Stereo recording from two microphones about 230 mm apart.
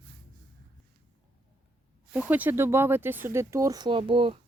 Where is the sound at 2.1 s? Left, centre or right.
Centre; by 4.4 s right.